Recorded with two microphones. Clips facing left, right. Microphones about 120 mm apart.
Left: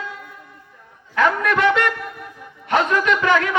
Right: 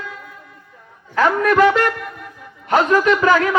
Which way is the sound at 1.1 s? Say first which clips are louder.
Right 4 dB; 35° right (ahead or behind).